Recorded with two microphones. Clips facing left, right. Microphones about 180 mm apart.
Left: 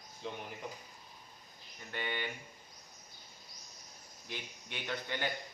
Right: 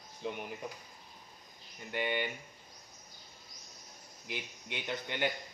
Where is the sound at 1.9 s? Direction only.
15° right (ahead or behind).